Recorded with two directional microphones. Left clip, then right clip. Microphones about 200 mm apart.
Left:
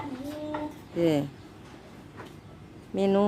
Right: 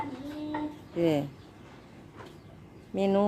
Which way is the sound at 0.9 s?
Centre (ahead or behind).